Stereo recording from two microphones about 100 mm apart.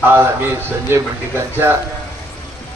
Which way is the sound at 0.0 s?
20° right (ahead or behind).